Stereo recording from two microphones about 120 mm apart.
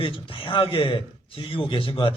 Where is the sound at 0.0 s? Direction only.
45° left (ahead or behind).